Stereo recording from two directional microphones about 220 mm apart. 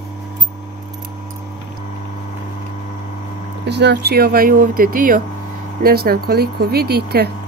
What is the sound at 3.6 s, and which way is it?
Speech, 50° right (ahead or behind).